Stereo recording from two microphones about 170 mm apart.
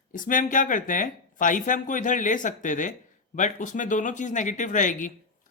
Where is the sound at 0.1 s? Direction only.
50° left (ahead or behind).